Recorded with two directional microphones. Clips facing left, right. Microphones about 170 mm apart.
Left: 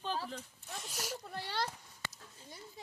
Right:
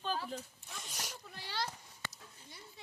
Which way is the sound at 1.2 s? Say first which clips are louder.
Left 1 dB; 55° left (ahead or behind).